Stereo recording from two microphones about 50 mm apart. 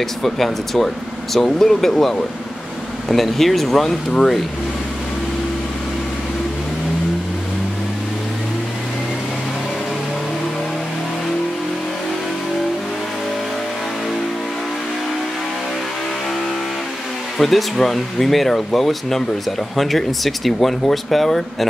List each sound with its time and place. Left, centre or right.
0.0 s speech: centre
17.4 s speech: centre